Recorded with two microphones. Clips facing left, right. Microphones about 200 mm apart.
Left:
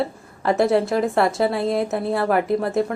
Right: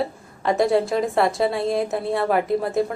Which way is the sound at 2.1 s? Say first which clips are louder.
Left 1 dB; 25° right (ahead or behind).